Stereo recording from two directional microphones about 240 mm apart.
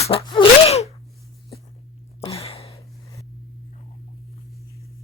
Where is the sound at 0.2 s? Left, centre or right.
Centre.